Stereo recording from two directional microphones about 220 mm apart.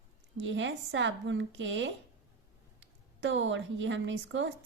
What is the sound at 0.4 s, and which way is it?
A woman's voice, 55° right (ahead or behind).